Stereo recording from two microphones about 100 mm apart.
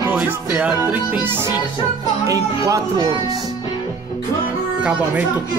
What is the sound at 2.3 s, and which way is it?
Speech, 30° right (ahead or behind).